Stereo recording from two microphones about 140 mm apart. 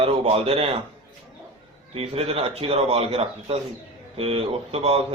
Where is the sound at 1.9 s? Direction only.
45° right (ahead or behind).